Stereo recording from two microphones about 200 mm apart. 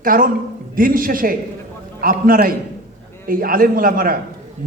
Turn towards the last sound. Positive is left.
turn(degrees=-45)  # may be behind; listen again after turning